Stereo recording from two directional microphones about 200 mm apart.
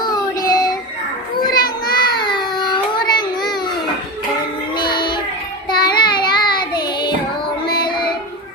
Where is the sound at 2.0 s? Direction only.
25° left (ahead or behind).